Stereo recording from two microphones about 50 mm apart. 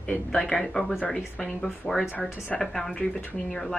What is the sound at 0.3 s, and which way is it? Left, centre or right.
Speech, centre.